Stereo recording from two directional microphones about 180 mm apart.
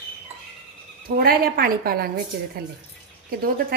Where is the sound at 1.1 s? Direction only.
55° right (ahead or behind).